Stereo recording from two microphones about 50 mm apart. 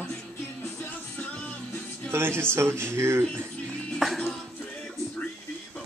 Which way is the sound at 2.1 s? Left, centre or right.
Right.